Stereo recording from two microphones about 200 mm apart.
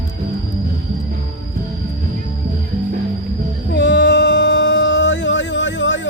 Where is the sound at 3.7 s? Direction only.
60° left (ahead or behind).